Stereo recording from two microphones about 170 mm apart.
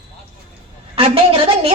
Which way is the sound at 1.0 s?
35° right (ahead or behind).